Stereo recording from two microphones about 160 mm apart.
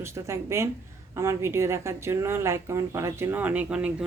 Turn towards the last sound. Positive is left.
turn(degrees=-5)  # may be behind; listen again after turning